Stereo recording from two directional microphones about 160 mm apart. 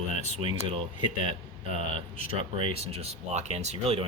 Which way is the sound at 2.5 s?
35° right (ahead or behind).